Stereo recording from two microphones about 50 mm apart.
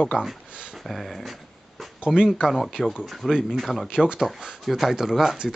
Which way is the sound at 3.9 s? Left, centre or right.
Centre.